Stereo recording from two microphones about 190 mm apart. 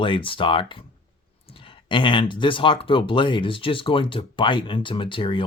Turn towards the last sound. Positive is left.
turn(degrees=25)  # may be behind; listen again after turning